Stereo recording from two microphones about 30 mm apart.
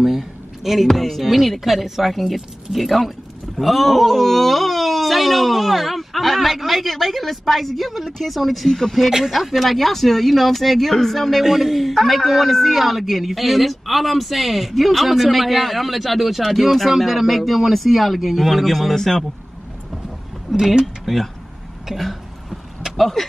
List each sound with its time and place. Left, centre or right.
0.0 s a sound: centre
0.9 s a man's voice: centre
11.4 s a man's voice: centre
20.5 s speech: right
21.1 s a man's voice: centre
21.9 s throat clearing: centre
22.9 s speech: centre